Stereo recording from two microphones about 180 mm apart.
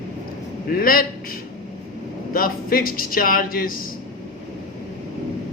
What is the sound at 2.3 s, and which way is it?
Speech, 55° left (ahead or behind).